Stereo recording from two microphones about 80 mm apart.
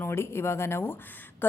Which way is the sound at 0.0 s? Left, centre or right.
Left.